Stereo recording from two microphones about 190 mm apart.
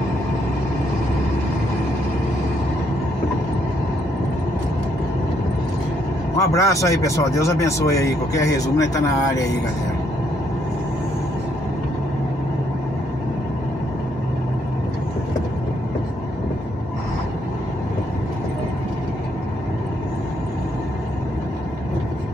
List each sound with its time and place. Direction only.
6.3 s speech: 15° left (ahead or behind)